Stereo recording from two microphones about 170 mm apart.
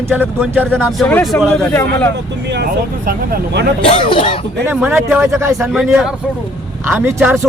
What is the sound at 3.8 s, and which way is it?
Speech, 30° left (ahead or behind).